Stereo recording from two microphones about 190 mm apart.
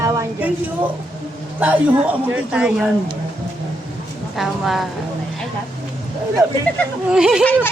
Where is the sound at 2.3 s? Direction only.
5° right (ahead or behind).